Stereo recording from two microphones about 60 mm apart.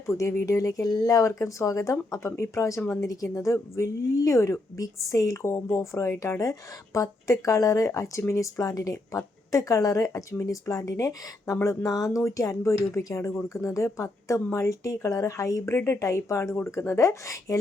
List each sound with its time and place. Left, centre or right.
0.1 s a woman's voice: left
6.4 s a woman's voice: left
12.2 s a woman's voice: left
15.7 s a woman's voice: left